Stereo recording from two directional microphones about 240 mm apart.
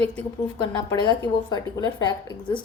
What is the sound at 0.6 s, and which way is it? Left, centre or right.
A woman's voice, centre.